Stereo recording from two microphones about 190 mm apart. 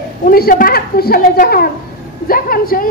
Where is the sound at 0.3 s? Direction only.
50° left (ahead or behind).